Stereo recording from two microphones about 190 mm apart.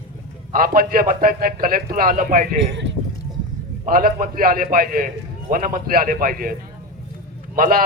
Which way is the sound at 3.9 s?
45° right (ahead or behind).